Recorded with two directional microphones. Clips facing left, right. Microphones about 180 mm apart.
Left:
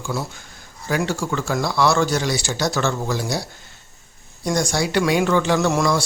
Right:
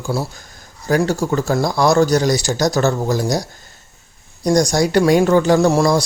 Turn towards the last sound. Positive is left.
turn(degrees=-35)  # may be behind; listen again after turning